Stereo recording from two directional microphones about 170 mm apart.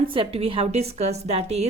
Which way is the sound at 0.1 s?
35° right (ahead or behind).